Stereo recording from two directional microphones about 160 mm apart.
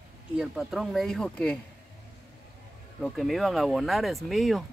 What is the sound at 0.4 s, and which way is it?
Speech, 5° right (ahead or behind).